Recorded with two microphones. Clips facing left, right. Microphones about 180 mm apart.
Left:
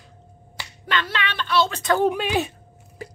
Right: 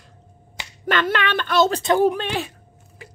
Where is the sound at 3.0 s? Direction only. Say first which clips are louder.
Left 7 dB; 40° left (ahead or behind).